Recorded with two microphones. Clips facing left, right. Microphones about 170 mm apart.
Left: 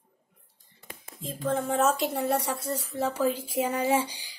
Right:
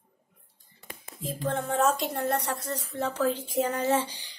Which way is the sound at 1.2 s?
Centre (ahead or behind).